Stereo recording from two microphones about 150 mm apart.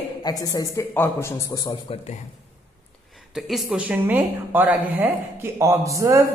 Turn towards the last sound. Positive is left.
turn(degrees=-20)  # may be behind; listen again after turning